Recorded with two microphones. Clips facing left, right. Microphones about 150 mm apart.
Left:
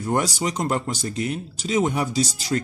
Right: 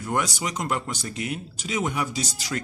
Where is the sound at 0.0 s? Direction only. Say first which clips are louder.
Left 4 dB; 35° left (ahead or behind).